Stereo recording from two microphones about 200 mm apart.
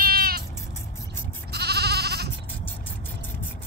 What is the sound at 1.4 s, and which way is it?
Goat, 55° right (ahead or behind).